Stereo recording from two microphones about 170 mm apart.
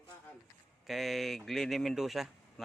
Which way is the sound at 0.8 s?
Centre (ahead or behind).